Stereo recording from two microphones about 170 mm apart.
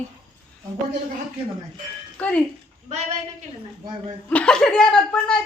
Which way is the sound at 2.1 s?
10° left (ahead or behind).